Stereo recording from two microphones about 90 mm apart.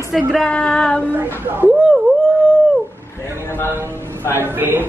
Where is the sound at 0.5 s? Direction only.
10° left (ahead or behind).